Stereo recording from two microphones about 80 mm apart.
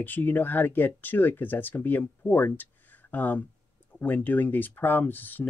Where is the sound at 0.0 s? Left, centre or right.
Left.